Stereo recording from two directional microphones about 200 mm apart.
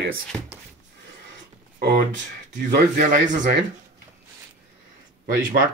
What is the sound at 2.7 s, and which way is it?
Speech, 40° right (ahead or behind).